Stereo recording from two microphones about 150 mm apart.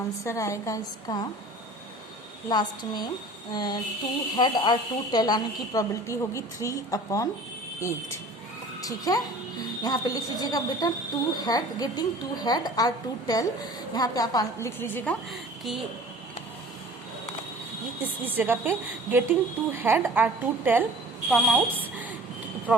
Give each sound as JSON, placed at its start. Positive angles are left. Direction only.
{"t": 0.3, "sound": "a woman's voice", "side_deg": 20}
{"t": 2.5, "sound": "a woman's voice", "side_deg": 30}
{"t": 15.3, "sound": "speech", "side_deg": 0}
{"t": 18.0, "sound": "a woman's voice", "side_deg": -10}
{"t": 21.2, "sound": "a woman's voice", "side_deg": 0}